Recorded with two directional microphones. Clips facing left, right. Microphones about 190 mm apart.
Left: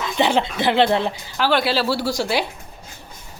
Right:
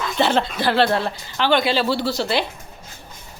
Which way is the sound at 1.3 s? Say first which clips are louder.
Right 1 dB; 5° left (ahead or behind).